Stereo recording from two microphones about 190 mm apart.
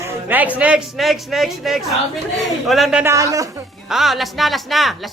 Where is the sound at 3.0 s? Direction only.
15° right (ahead or behind).